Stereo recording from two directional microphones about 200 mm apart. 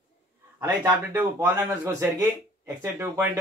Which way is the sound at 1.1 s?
10° right (ahead or behind).